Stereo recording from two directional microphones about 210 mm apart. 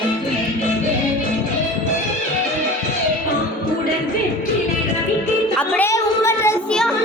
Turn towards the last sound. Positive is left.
turn(degrees=15)  # may be behind; listen again after turning